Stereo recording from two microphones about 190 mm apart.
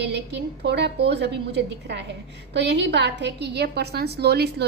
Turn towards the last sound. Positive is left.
turn(degrees=-60)  # may be behind; listen again after turning